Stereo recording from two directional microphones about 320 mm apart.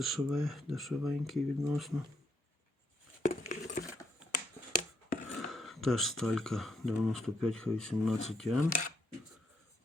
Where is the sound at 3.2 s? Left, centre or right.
Left.